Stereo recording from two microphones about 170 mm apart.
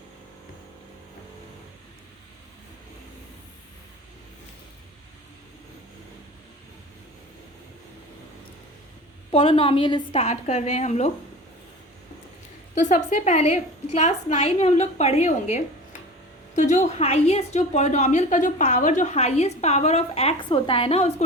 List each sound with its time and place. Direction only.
9.3 s a woman's voice: 35° left (ahead or behind)
12.8 s a woman's voice: 45° left (ahead or behind)
16.6 s a woman's voice: 45° left (ahead or behind)